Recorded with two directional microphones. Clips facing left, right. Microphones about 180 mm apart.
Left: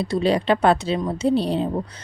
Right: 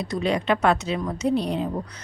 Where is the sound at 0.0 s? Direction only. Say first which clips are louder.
Left 4 dB; 30° left (ahead or behind).